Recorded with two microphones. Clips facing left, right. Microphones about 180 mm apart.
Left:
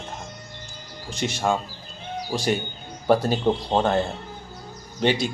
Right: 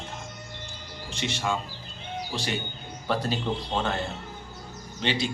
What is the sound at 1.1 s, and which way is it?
Speech, 40° left (ahead or behind).